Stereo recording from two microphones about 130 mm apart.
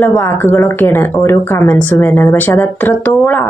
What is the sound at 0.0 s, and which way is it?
Speech, 15° left (ahead or behind).